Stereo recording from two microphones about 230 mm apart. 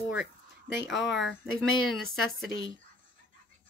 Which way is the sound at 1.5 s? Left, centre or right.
Left.